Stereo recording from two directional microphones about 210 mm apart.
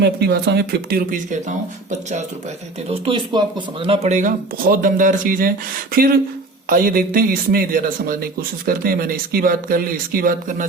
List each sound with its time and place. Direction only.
0.0 s a man's voice: 50° right (ahead or behind); by 2.2 s 35° right (ahead or behind)
2.9 s a man's voice: 25° right (ahead or behind); by 10.7 s 40° right (ahead or behind)